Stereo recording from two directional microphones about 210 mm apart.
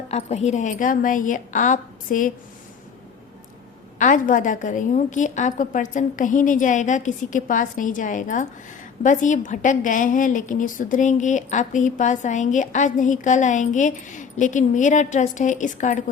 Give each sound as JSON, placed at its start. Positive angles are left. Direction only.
{"t": 0.1, "sound": "a woman's voice", "side_deg": 30}
{"t": 3.9, "sound": "a woman's voice", "side_deg": 40}